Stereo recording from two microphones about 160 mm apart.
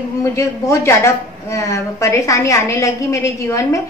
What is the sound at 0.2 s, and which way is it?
A woman's voice, 20° left (ahead or behind).